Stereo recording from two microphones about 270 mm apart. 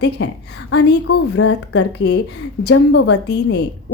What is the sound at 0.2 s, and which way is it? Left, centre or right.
Speech, left.